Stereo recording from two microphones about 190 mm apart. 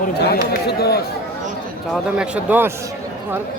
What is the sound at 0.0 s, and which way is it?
Speech, 55° left (ahead or behind).